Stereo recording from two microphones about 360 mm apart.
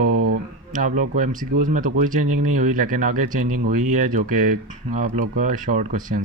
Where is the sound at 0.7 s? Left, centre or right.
Right.